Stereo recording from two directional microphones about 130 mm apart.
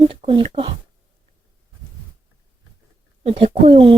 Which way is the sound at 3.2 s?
50° right (ahead or behind).